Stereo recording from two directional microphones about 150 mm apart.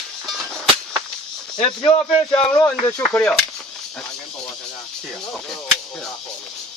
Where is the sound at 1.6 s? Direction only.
35° left (ahead or behind).